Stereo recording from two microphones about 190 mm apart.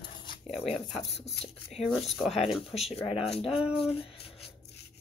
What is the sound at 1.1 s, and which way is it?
Speech, 30° left (ahead or behind).